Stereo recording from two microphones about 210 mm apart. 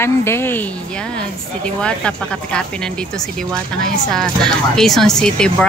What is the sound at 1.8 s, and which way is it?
Speech, 5° left (ahead or behind).